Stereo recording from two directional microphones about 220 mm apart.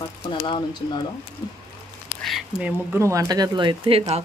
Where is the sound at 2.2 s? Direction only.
Centre (ahead or behind); by 4.2 s 25° right (ahead or behind).